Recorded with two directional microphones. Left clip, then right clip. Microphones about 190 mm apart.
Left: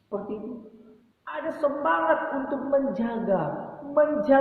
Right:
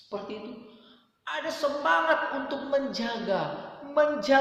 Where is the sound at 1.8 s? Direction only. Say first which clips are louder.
Even; 15° right (ahead or behind).